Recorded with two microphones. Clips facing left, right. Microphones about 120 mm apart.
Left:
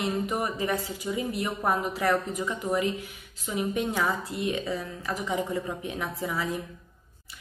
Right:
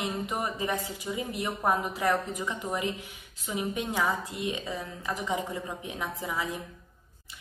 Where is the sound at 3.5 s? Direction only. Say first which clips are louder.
Left 3 dB; 15° right (ahead or behind).